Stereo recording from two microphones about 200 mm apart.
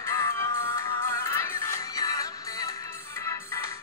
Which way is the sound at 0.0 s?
15° left (ahead or behind).